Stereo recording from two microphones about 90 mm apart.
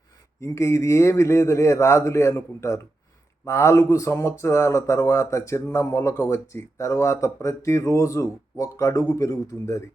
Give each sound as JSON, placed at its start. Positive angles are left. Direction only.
{"t": 0.4, "sound": "speech", "side_deg": 35}